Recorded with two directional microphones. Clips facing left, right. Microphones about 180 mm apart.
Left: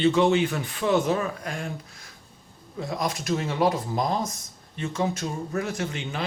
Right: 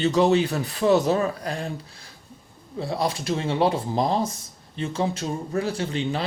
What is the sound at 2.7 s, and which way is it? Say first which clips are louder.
Speech: right 3 dB; 30° right (ahead or behind).